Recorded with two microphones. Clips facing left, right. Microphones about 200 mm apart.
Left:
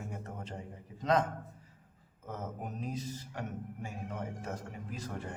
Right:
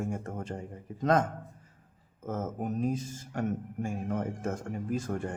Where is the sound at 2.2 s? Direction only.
45° right (ahead or behind).